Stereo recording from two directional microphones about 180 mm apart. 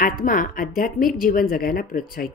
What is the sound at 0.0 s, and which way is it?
A woman's voice, 50° left (ahead or behind).